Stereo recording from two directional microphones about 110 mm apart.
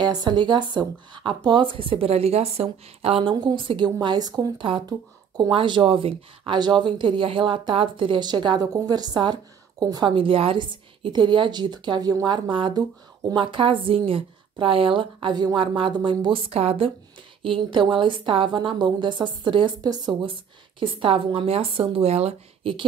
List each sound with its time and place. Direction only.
0.0 s speech: 40° right (ahead or behind)
10.1 s speech: 55° right (ahead or behind)
17.4 s speech: 50° right (ahead or behind)